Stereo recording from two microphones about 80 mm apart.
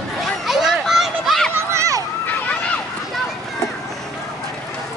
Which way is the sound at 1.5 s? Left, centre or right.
Right.